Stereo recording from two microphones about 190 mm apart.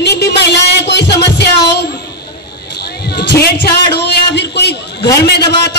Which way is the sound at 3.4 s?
60° left (ahead or behind).